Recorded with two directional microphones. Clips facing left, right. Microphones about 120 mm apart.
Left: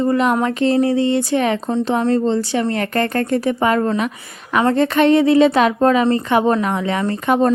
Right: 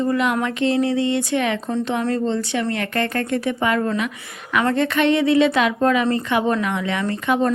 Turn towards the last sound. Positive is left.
turn(degrees=40)  # may be behind; listen again after turning